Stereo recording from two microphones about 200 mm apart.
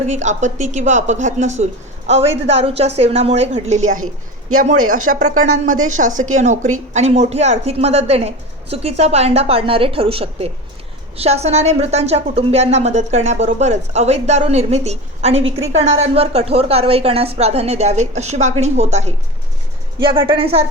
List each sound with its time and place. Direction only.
0.1 s a woman's voice: 35° right (ahead or behind)
4.0 s a woman's voice: 90° right
6.0 s a woman's voice: 40° right (ahead or behind)